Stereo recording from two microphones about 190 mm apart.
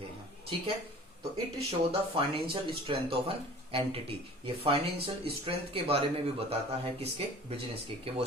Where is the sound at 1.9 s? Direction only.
30° right (ahead or behind).